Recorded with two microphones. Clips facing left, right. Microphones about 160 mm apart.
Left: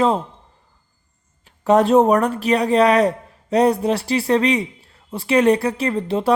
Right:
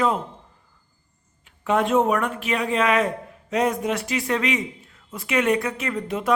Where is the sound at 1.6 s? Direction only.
40° left (ahead or behind).